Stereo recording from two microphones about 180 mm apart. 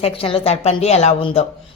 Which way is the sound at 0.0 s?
30° left (ahead or behind).